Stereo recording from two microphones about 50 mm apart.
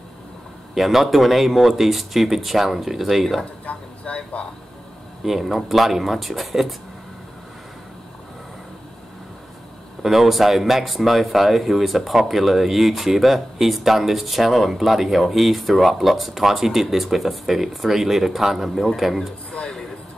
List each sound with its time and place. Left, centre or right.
0.7 s speech: centre
3.6 s vehicle: left
5.2 s speech: centre
10.0 s speech: centre
19.5 s a sound: centre